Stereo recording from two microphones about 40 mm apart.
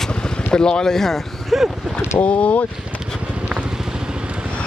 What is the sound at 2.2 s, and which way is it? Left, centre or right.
Speech, left.